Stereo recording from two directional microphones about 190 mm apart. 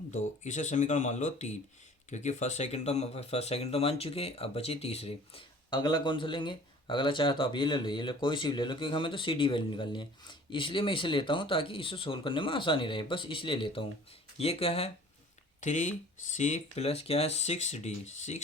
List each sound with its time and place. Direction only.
0.1 s speech: 40° left (ahead or behind)